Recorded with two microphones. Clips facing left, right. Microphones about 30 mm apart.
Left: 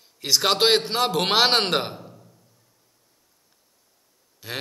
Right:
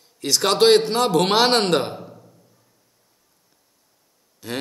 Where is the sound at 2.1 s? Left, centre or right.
Centre.